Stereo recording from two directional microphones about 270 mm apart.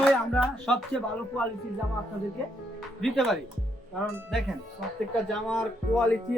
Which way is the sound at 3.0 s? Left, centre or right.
Centre.